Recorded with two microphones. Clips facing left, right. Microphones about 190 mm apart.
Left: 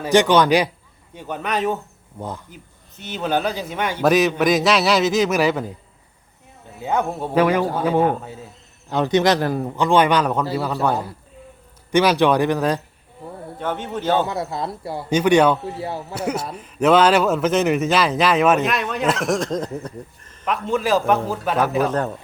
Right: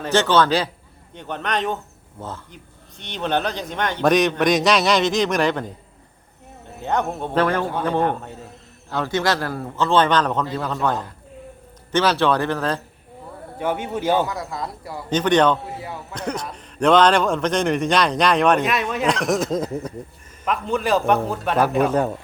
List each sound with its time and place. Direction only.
0.0 s a man's voice: 15° left (ahead or behind)
6.8 s a man's voice: 5° left (ahead or behind)
8.9 s a man's voice: 20° left (ahead or behind)
13.6 s a man's voice: 10° right (ahead or behind)
14.3 s a man's voice: 25° left (ahead or behind)
15.1 s a man's voice: 10° left (ahead or behind)
15.8 s speech: 30° left (ahead or behind)
16.1 s a man's voice: 10° left (ahead or behind); by 22.1 s 10° right (ahead or behind)